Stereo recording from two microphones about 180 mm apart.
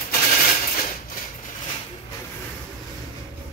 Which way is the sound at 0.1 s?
50° left (ahead or behind).